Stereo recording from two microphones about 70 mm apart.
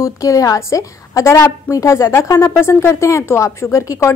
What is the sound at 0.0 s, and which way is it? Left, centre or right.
A woman's voice, left.